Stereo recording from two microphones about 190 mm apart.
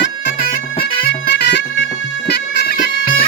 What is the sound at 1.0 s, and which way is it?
Music, 55° left (ahead or behind).